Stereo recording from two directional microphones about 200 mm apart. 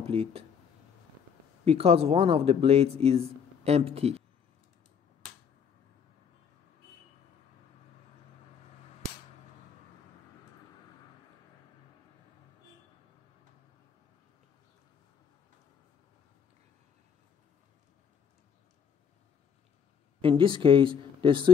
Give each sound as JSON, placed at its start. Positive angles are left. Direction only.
{"t": 0.0, "sound": "speech", "side_deg": -30}
{"t": 1.6, "sound": "speech", "side_deg": -30}
{"t": 20.2, "sound": "speech", "side_deg": -25}